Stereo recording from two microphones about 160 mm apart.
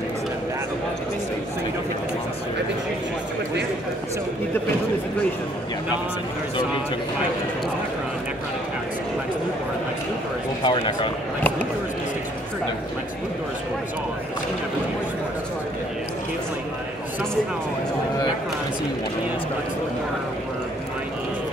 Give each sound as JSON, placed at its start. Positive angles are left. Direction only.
{"t": 10.6, "sound": "speech", "side_deg": 25}